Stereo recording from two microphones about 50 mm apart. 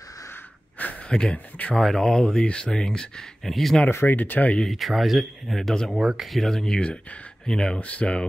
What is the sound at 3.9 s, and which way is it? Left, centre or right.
Speech, left.